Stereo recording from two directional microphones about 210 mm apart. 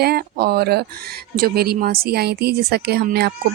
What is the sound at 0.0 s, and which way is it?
Speech, 50° right (ahead or behind).